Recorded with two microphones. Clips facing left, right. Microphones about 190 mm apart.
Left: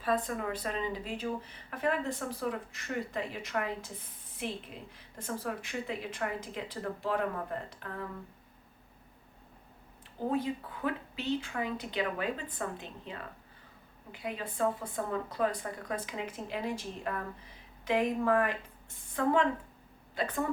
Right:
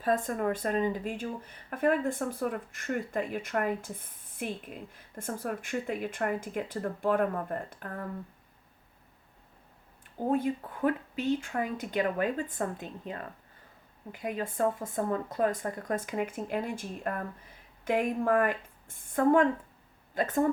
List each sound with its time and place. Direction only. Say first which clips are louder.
0.0 s speech: right 3 dB; 45° right (ahead or behind)
10.2 s a woman's voice: right 3 dB; 50° right (ahead or behind)